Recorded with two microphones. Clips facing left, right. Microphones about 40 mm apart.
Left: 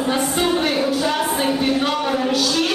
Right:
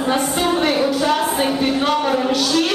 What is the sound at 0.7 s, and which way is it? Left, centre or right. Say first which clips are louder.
Music: right 2 dB; right.